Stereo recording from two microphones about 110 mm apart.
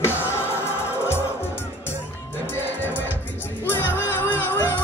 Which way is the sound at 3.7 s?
20° left (ahead or behind).